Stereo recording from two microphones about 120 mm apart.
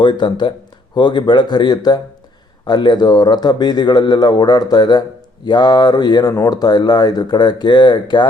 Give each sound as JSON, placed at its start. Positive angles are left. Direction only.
{"t": 0.0, "sound": "a man's voice", "side_deg": 40}